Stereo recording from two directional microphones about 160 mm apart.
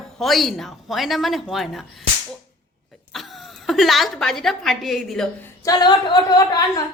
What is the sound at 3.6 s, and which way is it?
Speech, centre (ahead or behind).